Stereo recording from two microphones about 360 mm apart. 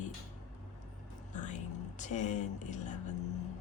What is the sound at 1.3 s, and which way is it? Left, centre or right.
A woman's voice, centre.